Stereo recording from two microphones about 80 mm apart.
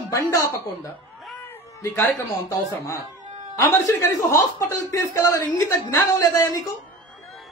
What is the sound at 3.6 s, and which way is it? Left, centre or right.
Speech, left.